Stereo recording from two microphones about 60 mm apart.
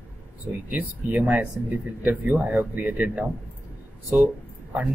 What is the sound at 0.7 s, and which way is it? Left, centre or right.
Speech, right.